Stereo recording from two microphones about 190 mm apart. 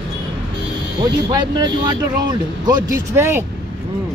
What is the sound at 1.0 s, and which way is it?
Speech, 20° right (ahead or behind).